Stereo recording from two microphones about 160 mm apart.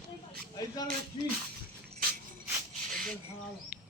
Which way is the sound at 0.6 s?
25° left (ahead or behind).